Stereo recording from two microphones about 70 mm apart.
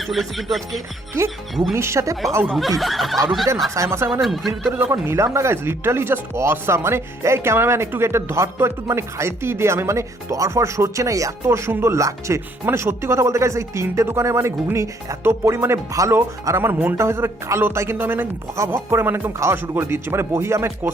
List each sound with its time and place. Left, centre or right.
0.0 s speech: centre
1.7 s speech: right
2.5 s speech: centre
3.8 s speech: right
4.2 s speech: centre
4.9 s speech: right
15.9 s speech: right
16.1 s speech: right